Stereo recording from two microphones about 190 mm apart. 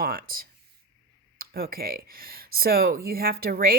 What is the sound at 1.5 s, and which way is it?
Speech, 50° right (ahead or behind).